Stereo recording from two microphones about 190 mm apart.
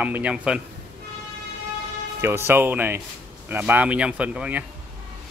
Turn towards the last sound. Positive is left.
turn(degrees=-5)  # may be behind; listen again after turning